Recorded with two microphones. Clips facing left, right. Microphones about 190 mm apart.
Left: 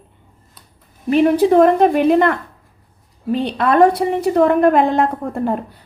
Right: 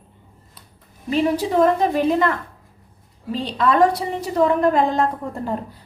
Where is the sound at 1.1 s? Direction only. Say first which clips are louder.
Left 7 dB; 60° left (ahead or behind).